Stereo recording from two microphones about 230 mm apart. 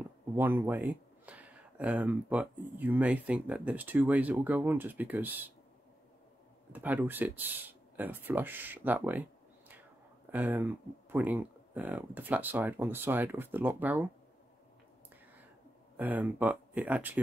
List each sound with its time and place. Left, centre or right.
0.4 s speech: centre
6.7 s speech: centre
16.0 s speech: centre